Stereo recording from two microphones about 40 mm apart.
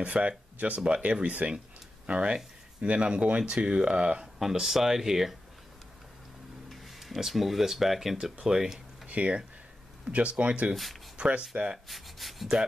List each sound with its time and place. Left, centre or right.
0.0 s speech: right
4.4 s speech: centre
6.7 s speech: centre
9.0 s speech: right
10.7 s speech: centre
11.1 s speech: right
11.9 s speech: centre